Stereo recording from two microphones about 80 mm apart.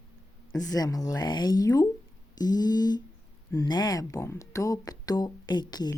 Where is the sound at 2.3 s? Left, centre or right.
Left.